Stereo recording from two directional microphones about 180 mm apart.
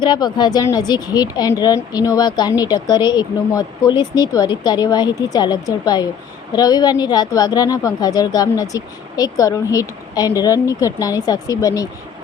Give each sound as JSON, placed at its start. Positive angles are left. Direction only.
{"t": 0.0, "sound": "a woman's voice", "side_deg": 25}